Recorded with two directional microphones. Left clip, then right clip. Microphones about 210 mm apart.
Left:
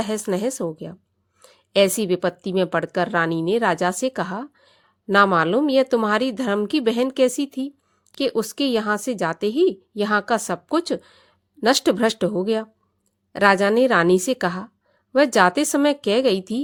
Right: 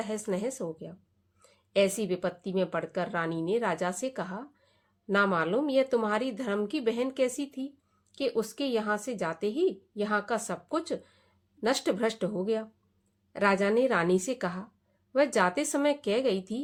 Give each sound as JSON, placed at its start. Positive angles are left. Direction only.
{"t": 0.0, "sound": "a woman's voice", "side_deg": 45}